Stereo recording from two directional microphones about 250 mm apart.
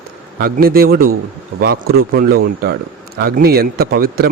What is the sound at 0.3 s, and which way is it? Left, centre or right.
Speech, right.